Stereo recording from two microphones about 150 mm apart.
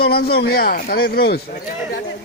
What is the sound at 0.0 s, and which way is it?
Speech, 90° left.